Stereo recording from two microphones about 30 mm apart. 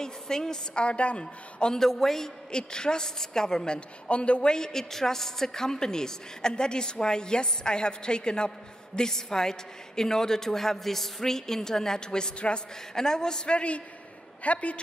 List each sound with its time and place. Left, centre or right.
0.0 s a woman's voice: left
0.7 s a woman's voice: left
1.2 s a woman's voice: left
1.8 s a woman's voice: centre
2.5 s a woman's voice: left
4.1 s a woman's voice: left
4.5 s a woman's voice: left
12.4 s a woman's voice: left
12.9 s a woman's voice: left
13.6 s a woman's voice: left